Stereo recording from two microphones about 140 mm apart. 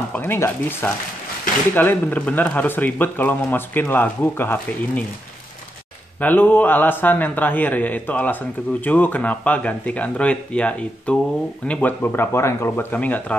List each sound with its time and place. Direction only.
0.1 s a man's voice: 15° left (ahead or behind)
6.1 s a man's voice: 10° left (ahead or behind)